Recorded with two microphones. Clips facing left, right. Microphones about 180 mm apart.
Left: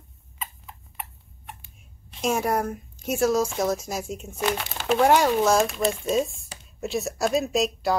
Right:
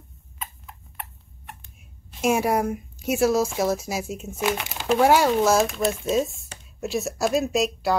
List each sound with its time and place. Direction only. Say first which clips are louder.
0.4 s a sound: even; centre (ahead or behind)
2.2 s speech: right 3 dB; 10° right (ahead or behind)
4.6 s speech: even; 15° right (ahead or behind)
4.8 s speech: right 1 dB; 5° right (ahead or behind)